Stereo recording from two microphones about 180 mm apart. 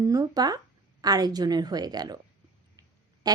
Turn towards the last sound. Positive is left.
turn(degrees=-25)  # may be behind; listen again after turning